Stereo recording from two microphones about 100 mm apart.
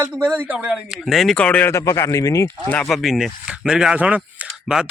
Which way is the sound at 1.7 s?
30° left (ahead or behind).